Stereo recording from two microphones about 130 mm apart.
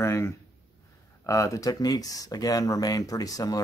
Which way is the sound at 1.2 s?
25° left (ahead or behind).